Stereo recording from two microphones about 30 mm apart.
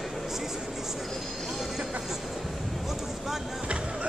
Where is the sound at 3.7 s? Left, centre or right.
Right.